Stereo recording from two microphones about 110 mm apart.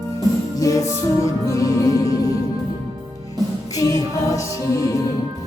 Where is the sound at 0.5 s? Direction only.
30° left (ahead or behind).